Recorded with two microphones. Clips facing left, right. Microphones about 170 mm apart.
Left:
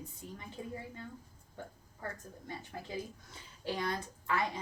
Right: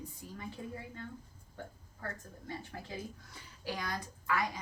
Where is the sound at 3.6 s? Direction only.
25° left (ahead or behind).